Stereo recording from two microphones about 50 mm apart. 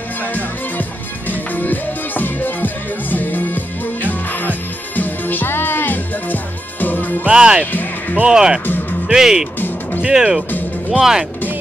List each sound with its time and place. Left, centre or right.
0.7 s music: left
7.2 s speech: centre